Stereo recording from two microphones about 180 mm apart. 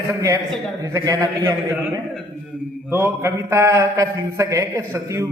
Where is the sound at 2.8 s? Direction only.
15° right (ahead or behind).